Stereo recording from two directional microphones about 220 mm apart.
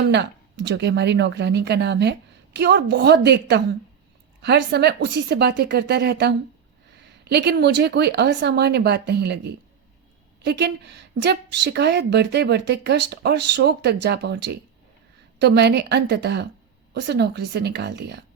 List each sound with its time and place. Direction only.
0.1 s a woman's voice: 55° right (ahead or behind)